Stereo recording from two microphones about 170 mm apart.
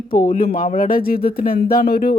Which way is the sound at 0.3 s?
55° left (ahead or behind).